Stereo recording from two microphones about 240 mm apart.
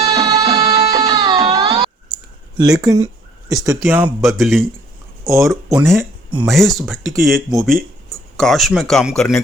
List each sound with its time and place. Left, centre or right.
0.0 s music: centre
2.6 s speech: centre